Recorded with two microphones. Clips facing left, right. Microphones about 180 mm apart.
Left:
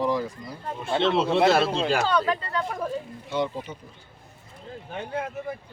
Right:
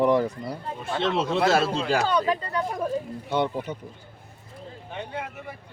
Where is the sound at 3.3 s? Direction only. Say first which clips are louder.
Right 2 dB; 60° right (ahead or behind).